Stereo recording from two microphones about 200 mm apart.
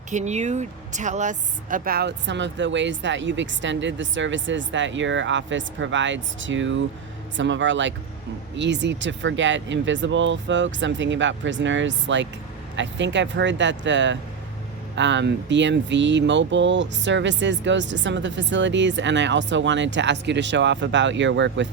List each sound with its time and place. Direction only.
0.1 s speech: 35° right (ahead or behind); by 21.7 s 65° right (ahead or behind)